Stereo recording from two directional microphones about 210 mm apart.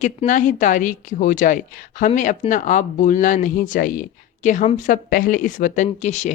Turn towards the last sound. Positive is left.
turn(degrees=35)  # may be behind; listen again after turning